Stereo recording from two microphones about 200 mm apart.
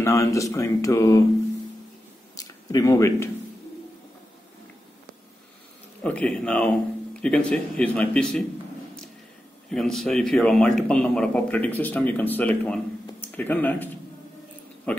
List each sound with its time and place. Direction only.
0.0 s speech: 15° left (ahead or behind)
2.3 s a sound: 20° left (ahead or behind)
6.0 s speech: 5° left (ahead or behind)
9.7 s speech: centre (ahead or behind)
14.9 s speech: 5° left (ahead or behind)